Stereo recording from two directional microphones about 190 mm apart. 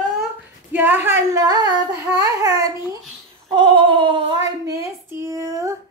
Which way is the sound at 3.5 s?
25° right (ahead or behind).